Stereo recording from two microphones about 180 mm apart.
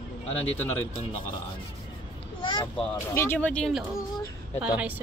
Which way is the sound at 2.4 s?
25° left (ahead or behind).